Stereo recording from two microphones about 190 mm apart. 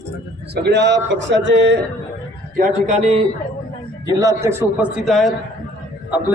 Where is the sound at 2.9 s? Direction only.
35° right (ahead or behind).